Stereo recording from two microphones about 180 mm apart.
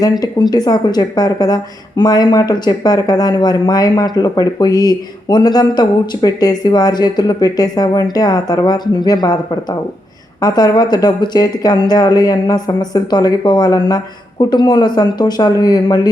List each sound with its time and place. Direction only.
0.2 s a woman's voice: 20° left (ahead or behind)
10.4 s a woman's voice: 20° left (ahead or behind)